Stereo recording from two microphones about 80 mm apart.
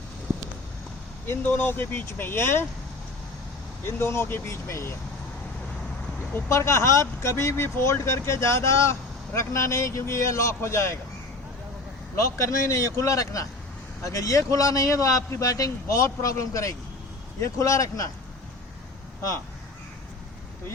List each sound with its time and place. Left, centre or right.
1.3 s speech: left
3.8 s speech: left
6.5 s speech: left
12.1 s a man's voice: left